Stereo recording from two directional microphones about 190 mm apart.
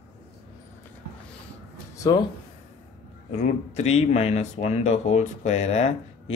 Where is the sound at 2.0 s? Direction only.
20° left (ahead or behind).